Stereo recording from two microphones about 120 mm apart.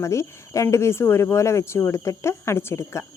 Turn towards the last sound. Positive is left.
turn(degrees=25)  # may be behind; listen again after turning